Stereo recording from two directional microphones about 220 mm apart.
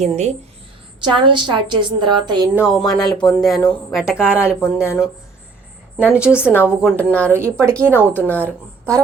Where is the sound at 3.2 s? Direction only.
20° left (ahead or behind).